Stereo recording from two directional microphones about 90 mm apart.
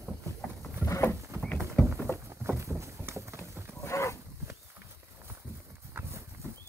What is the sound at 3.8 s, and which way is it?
Livestock, 30° left (ahead or behind).